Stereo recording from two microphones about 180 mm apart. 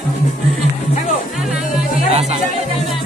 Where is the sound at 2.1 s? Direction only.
35° right (ahead or behind).